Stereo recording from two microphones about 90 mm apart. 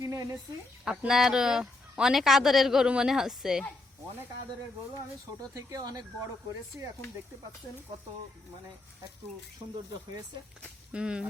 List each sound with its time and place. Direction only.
0.0 s a sound: 40° right (ahead or behind)
0.9 s speech: 5° right (ahead or behind)
5.4 s speech: 45° right (ahead or behind)
10.9 s speech: 10° right (ahead or behind)